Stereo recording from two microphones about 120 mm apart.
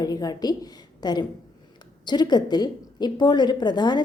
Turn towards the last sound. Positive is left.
turn(degrees=40)  # may be behind; listen again after turning